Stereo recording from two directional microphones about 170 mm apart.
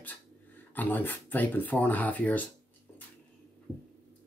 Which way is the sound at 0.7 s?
10° left (ahead or behind).